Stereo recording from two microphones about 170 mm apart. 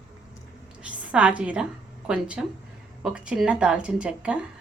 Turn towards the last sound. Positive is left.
turn(degrees=-5)  # may be behind; listen again after turning